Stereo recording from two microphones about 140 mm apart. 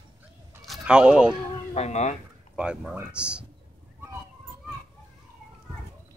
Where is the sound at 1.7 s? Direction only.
55° left (ahead or behind).